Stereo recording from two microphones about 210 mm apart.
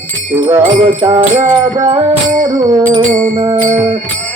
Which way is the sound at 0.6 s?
35° right (ahead or behind).